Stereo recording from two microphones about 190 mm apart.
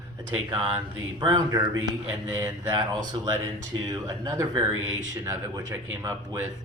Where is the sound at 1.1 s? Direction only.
20° right (ahead or behind).